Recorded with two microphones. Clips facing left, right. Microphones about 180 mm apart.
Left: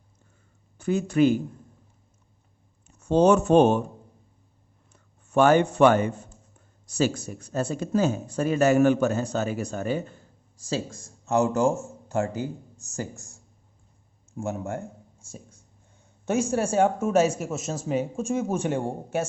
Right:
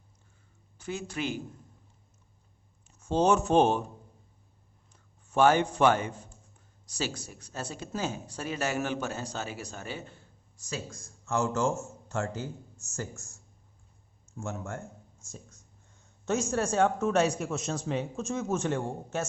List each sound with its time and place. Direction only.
0.8 s speech: 50° left (ahead or behind)
3.0 s speech: 60° left (ahead or behind)
5.4 s speech: 55° left (ahead or behind)
10.6 s speech: 30° left (ahead or behind)
10.9 s a man's voice: 20° left (ahead or behind)
12.7 s speech: 35° left (ahead or behind)
14.3 s a man's voice: 15° left (ahead or behind)